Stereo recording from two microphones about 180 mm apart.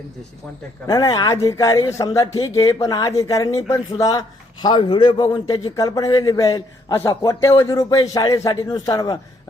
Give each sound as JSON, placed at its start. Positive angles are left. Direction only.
{"t": 0.9, "sound": "a man's voice", "side_deg": 20}